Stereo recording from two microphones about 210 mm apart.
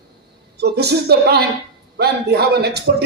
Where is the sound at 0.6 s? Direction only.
50° right (ahead or behind).